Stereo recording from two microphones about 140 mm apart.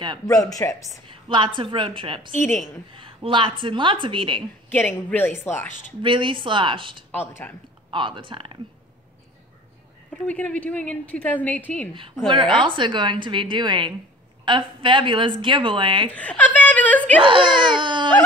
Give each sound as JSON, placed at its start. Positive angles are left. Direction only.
{"t": 0.3, "sound": "speech", "side_deg": 25}
{"t": 1.0, "sound": "a woman's voice", "side_deg": -35}
{"t": 2.4, "sound": "a woman's voice", "side_deg": 15}
{"t": 2.9, "sound": "a woman's voice", "side_deg": -40}
{"t": 4.6, "sound": "a woman's voice", "side_deg": 10}
{"t": 6.0, "sound": "a woman's voice", "side_deg": -35}
{"t": 7.1, "sound": "a woman's voice", "side_deg": 15}
{"t": 7.9, "sound": "a woman's voice", "side_deg": -35}
{"t": 10.2, "sound": "a woman's voice", "side_deg": 10}
{"t": 12.3, "sound": "a woman's voice", "side_deg": -35}
{"t": 16.1, "sound": "laughter", "side_deg": 10}
{"t": 17.2, "sound": "a woman's voice", "side_deg": -35}